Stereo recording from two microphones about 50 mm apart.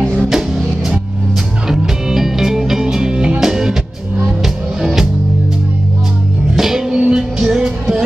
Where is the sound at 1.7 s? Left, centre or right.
Centre.